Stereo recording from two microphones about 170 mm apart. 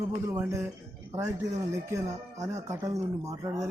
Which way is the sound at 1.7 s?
20° right (ahead or behind).